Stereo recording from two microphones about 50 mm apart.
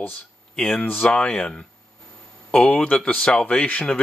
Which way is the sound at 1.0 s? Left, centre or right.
Centre.